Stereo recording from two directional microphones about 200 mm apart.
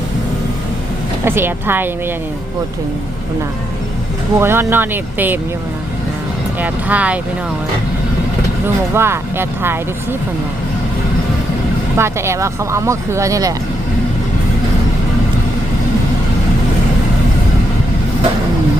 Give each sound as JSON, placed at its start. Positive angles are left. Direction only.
{"t": 1.2, "sound": "speech", "side_deg": -10}
{"t": 4.4, "sound": "speech", "side_deg": -10}
{"t": 6.6, "sound": "speech", "side_deg": -5}
{"t": 8.6, "sound": "speech", "side_deg": -10}
{"t": 11.9, "sound": "speech", "side_deg": -15}